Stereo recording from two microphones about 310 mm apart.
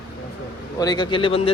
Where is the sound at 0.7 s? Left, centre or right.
Centre.